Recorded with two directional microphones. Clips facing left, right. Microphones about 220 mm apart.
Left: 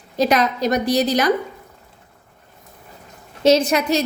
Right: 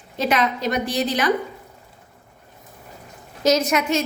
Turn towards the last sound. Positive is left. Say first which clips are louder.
# left 2 dB
turn(degrees=35)  # may be behind; listen again after turning